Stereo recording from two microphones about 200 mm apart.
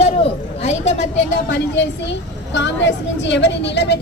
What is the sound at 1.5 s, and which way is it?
A woman's voice, 55° left (ahead or behind).